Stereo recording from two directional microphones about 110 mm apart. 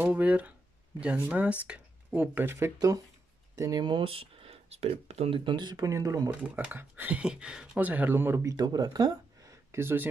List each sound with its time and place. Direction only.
0.0 s speech: 15° right (ahead or behind); by 3.8 s 30° right (ahead or behind)
3.8 s speech: 50° right (ahead or behind); by 5.3 s 75° right (ahead or behind)
5.3 s speech: 45° right (ahead or behind); by 6.3 s 30° right (ahead or behind)
6.4 s speech: 15° right (ahead or behind)
8.5 s speech: 35° right (ahead or behind)
9.7 s speech: 20° right (ahead or behind)